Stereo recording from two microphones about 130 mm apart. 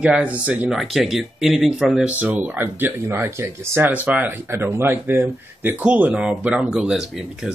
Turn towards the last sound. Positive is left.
turn(degrees=-5)  # may be behind; listen again after turning